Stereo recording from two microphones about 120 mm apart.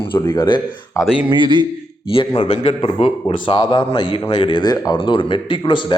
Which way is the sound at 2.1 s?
55° left (ahead or behind).